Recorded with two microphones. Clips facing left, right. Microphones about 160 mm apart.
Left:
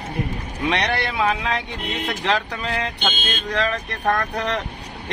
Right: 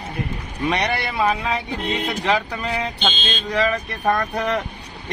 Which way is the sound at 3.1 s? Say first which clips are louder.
Right 1 dB; 50° left (ahead or behind).